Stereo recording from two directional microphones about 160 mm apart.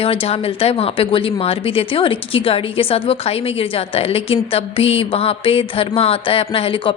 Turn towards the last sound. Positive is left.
turn(degrees=35)  # may be behind; listen again after turning